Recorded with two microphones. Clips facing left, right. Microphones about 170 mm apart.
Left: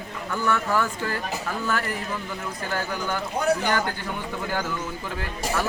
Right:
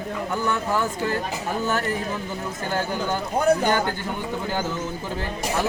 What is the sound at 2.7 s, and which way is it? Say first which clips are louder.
Speech: right 3 dB; 30° right (ahead or behind).